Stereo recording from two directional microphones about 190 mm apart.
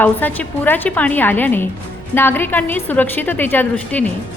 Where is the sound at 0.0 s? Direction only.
10° left (ahead or behind).